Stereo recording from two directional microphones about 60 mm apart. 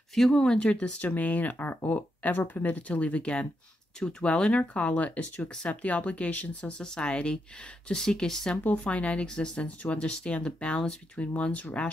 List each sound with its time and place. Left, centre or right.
0.1 s speech: centre